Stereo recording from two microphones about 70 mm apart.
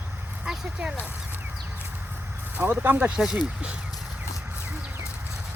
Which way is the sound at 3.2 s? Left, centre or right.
Centre.